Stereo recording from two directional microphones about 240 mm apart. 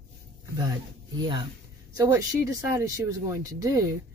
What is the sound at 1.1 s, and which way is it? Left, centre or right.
A woman's voice, centre.